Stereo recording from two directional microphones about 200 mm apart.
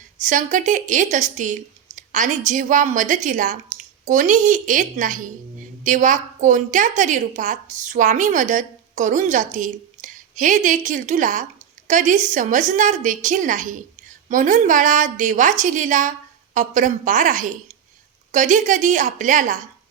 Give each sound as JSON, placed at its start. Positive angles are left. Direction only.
{"t": 0.2, "sound": "a woman's voice", "side_deg": -40}